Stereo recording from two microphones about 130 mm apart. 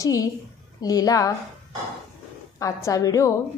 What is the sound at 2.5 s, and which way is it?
Speech, 25° left (ahead or behind).